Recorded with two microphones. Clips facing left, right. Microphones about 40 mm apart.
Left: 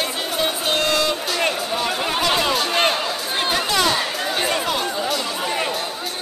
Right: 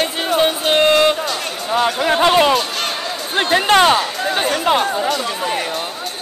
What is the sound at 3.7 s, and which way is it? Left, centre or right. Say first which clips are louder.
Speech: right 10 dB; right.